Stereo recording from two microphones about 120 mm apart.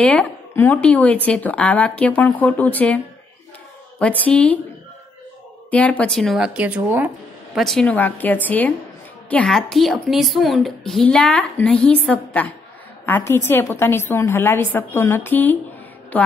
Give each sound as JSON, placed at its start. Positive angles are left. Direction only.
{"t": 0.0, "sound": "speech", "side_deg": 10}
{"t": 4.0, "sound": "speech", "side_deg": 10}
{"t": 5.7, "sound": "a woman's voice", "side_deg": 10}
{"t": 7.5, "sound": "a woman's voice", "side_deg": 0}
{"t": 7.8, "sound": "speech", "side_deg": 15}
{"t": 9.3, "sound": "a woman's voice", "side_deg": 5}